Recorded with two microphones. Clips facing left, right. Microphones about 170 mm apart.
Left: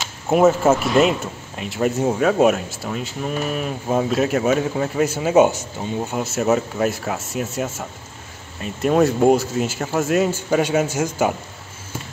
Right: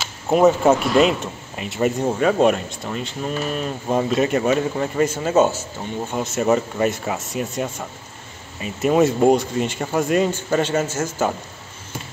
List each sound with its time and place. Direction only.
0.3 s speech: centre (ahead or behind)